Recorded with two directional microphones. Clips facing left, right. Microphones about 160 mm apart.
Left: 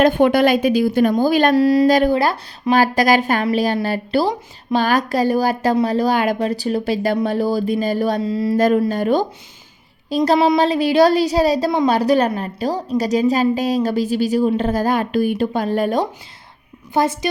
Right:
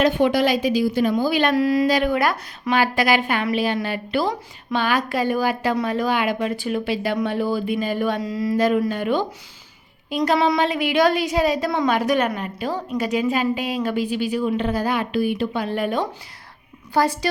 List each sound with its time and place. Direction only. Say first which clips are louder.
0.0 s a woman's voice: left 4 dB; 50° left (ahead or behind); by 8.5 s 30° left (ahead or behind)
8.5 s a woman's voice: left 3 dB; 45° left (ahead or behind)
16.9 s a woman's voice: left 2 dB; 20° left (ahead or behind)